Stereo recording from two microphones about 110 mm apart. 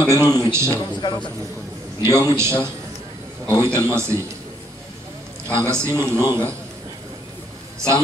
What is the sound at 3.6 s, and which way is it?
Speech, 25° right (ahead or behind).